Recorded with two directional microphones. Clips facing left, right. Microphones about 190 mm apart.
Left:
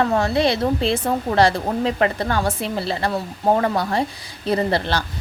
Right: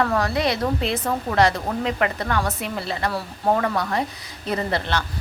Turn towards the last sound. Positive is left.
turn(degrees=35)  # may be behind; listen again after turning